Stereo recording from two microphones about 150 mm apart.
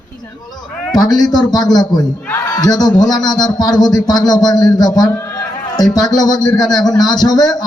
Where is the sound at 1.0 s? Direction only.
25° left (ahead or behind).